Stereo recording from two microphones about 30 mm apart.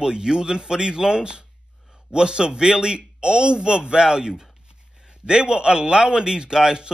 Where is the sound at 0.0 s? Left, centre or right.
Right.